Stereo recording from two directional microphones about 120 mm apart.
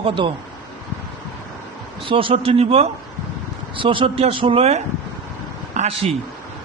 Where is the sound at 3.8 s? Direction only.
45° right (ahead or behind).